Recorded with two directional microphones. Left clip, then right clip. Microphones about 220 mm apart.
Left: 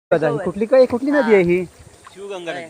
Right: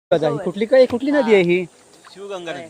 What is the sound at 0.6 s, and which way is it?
Speech, 10° right (ahead or behind).